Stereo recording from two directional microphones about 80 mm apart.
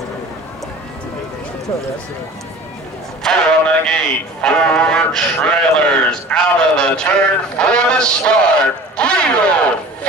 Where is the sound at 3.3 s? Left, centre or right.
Centre.